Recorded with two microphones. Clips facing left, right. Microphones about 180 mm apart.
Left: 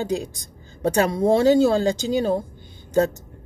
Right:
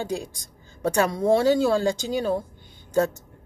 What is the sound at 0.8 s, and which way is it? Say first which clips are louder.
Speech: left 3 dB; 30° left (ahead or behind).